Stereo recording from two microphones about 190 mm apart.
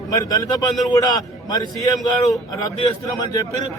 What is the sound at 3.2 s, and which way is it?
Speech, 20° left (ahead or behind).